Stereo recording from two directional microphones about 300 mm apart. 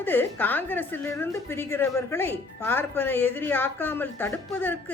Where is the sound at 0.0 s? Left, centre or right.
Centre.